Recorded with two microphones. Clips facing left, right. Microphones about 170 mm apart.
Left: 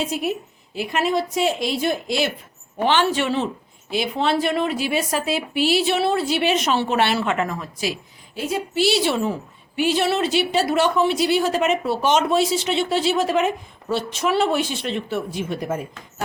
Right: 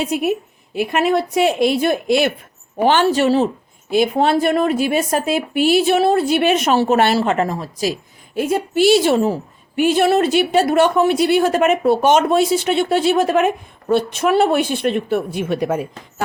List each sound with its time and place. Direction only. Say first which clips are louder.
0.0 s a woman's voice: right 5 dB; 55° right (ahead or behind)
2.8 s a woman's voice: right 5 dB; 40° right (ahead or behind)
8.4 s a woman's voice: right 6 dB; 55° right (ahead or behind); by 15.8 s 75° right (ahead or behind)